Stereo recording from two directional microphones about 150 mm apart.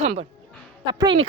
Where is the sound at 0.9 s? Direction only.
30° right (ahead or behind).